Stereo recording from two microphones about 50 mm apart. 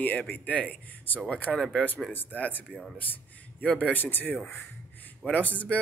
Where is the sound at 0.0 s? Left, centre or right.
Left.